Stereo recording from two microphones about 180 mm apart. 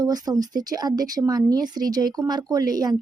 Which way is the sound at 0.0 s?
20° right (ahead or behind).